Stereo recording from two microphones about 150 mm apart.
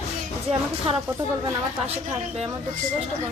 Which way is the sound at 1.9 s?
45° right (ahead or behind).